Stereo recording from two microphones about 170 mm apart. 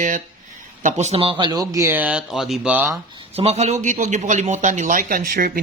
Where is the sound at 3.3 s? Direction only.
40° right (ahead or behind).